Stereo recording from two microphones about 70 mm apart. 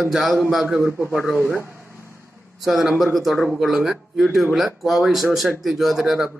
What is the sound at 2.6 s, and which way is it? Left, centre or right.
Speech, centre.